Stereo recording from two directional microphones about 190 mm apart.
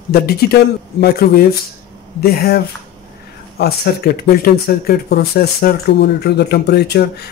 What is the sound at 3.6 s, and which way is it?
Speech, 55° left (ahead or behind).